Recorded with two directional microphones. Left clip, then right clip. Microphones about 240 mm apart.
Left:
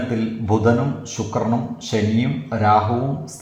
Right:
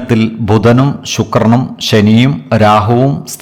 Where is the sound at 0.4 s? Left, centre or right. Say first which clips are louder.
Right 8 dB; right.